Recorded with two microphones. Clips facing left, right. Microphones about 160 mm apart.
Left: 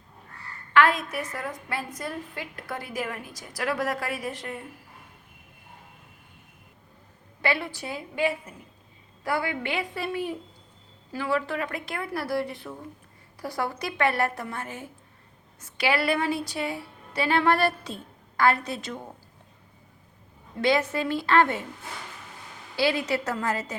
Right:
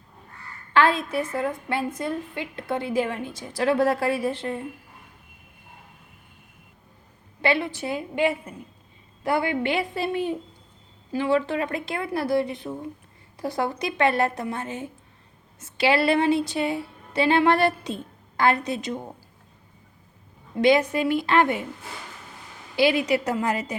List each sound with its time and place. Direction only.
0.7 s a woman's voice: 30° right (ahead or behind)
7.4 s a woman's voice: 20° right (ahead or behind)
20.6 s a woman's voice: 15° right (ahead or behind)
22.7 s a woman's voice: 15° right (ahead or behind)